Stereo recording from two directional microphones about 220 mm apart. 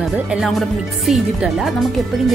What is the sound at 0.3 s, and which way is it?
Speech, centre (ahead or behind).